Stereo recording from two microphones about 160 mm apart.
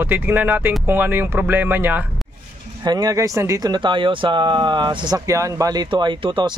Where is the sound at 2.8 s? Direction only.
25° right (ahead or behind).